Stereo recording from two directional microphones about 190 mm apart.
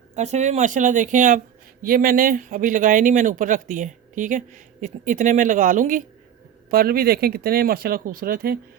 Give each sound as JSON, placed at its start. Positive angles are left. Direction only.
{"t": 0.2, "sound": "speech", "side_deg": -35}